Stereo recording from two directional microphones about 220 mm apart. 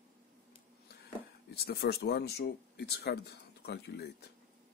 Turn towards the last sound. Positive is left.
turn(degrees=45)  # may be behind; listen again after turning